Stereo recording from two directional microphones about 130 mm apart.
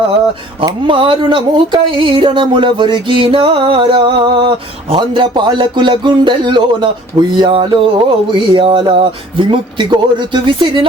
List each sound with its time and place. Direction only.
0.6 s speech: 40° right (ahead or behind)